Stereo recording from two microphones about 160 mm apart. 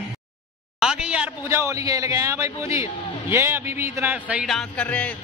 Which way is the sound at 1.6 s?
20° right (ahead or behind).